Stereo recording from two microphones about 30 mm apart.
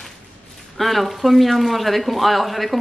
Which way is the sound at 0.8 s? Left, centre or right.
Centre.